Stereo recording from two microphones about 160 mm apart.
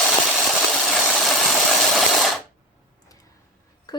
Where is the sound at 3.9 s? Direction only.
25° left (ahead or behind).